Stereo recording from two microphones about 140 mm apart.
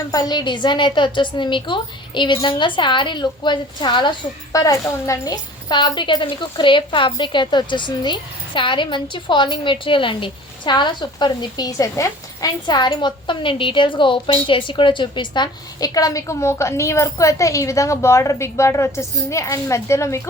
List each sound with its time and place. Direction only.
0.1 s a woman's voice: 30° left (ahead or behind)